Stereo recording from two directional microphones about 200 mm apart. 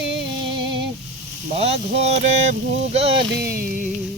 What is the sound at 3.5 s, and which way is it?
Music, 45° right (ahead or behind).